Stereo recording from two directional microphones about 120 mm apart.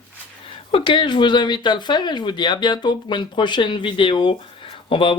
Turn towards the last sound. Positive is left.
turn(degrees=50)  # may be behind; listen again after turning